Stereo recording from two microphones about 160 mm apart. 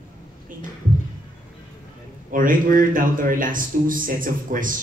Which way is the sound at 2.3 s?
60° right (ahead or behind).